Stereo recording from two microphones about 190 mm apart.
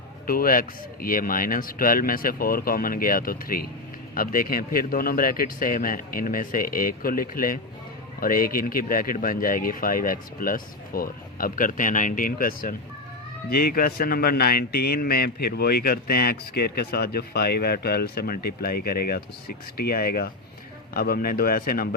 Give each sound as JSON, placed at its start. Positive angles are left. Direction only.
{"t": 0.3, "sound": "a man's voice", "side_deg": 50}